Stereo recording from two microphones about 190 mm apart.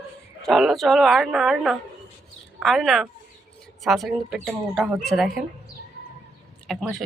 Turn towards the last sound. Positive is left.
turn(degrees=0)  # may be behind; listen again after turning